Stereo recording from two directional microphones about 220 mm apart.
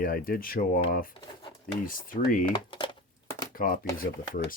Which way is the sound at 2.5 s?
20° left (ahead or behind).